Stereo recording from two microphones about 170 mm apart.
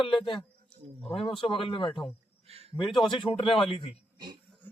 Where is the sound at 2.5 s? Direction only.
35° right (ahead or behind).